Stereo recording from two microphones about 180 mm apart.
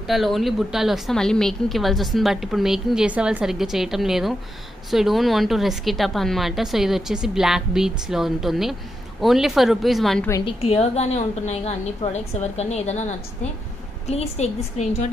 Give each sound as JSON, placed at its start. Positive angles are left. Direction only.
{"t": 0.1, "sound": "a woman's voice", "side_deg": 0}
{"t": 10.4, "sound": "a woman's voice", "side_deg": 35}